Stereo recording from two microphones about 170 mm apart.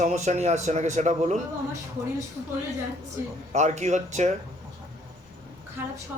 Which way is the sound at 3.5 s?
45° right (ahead or behind).